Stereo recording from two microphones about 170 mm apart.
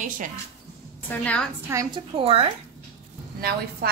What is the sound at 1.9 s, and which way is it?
Speech, 35° right (ahead or behind).